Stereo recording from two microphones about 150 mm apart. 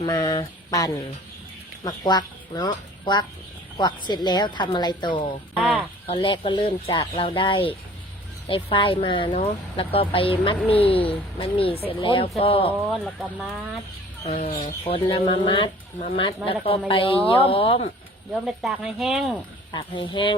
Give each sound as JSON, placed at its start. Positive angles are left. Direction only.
{"t": 0.0, "sound": "speech", "side_deg": 25}
{"t": 12.9, "sound": "speech", "side_deg": 0}
{"t": 14.3, "sound": "speech", "side_deg": 40}
{"t": 14.5, "sound": "speech", "side_deg": 70}
{"t": 14.8, "sound": "speech", "side_deg": 40}
{"t": 18.4, "sound": "speech", "side_deg": 0}
{"t": 19.7, "sound": "speech", "side_deg": 30}